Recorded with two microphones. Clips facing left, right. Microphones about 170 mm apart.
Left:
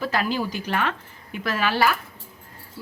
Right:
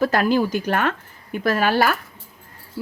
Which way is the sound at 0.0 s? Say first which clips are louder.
Right 7 dB; 50° right (ahead or behind).